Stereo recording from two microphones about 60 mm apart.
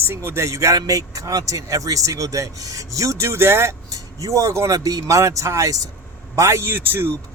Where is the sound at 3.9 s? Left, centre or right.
Right.